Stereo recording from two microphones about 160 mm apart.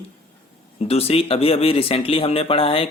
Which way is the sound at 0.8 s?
40° left (ahead or behind).